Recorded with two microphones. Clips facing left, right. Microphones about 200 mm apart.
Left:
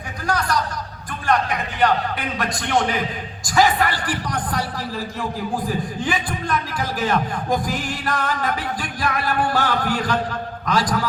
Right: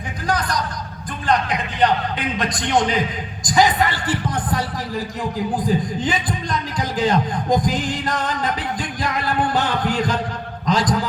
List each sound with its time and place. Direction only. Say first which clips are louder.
0.3 s a man's voice: even; 20° right (ahead or behind)